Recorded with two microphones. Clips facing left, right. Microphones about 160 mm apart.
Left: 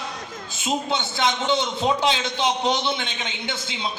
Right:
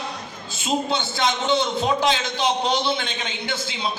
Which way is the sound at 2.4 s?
20° left (ahead or behind).